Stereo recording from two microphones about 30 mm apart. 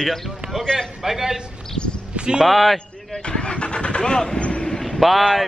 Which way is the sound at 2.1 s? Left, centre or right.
Right.